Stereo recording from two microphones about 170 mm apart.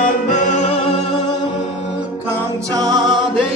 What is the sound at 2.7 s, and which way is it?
Music, 20° right (ahead or behind).